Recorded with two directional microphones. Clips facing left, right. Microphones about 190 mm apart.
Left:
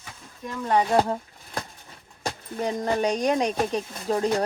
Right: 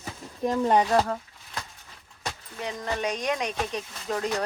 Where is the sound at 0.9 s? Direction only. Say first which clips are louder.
Left 2 dB; 30° left (ahead or behind).